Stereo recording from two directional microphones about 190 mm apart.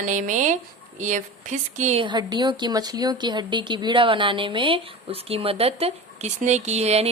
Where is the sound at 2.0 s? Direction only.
20° right (ahead or behind).